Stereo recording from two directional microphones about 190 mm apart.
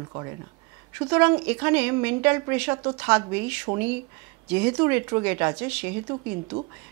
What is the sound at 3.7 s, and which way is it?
Speech, 25° right (ahead or behind).